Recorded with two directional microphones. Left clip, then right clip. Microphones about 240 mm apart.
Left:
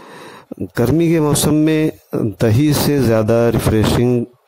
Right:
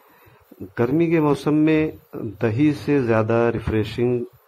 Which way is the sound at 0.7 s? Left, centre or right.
Left.